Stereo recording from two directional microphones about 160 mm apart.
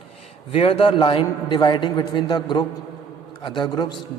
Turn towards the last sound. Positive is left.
turn(degrees=30)  # may be behind; listen again after turning